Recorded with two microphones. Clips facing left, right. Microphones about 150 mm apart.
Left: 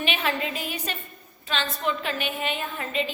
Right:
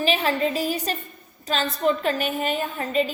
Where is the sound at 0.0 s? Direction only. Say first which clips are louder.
Right 5 dB; 35° right (ahead or behind).